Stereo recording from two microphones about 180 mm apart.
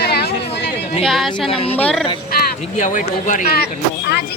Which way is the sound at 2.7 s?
45° left (ahead or behind).